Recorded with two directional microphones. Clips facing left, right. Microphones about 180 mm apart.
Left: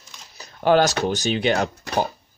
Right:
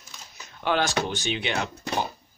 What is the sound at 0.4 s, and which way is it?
Speech, 40° left (ahead or behind).